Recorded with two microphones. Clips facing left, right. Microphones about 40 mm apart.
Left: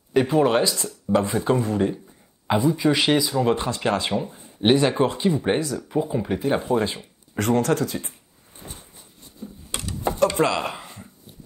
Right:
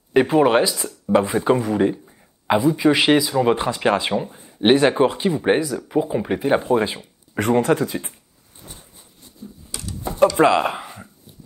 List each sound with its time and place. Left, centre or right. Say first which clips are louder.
0.1 s speech: right 3 dB; right
8.6 s a sound: left 1 dB; left
10.3 s speech: right 6 dB; right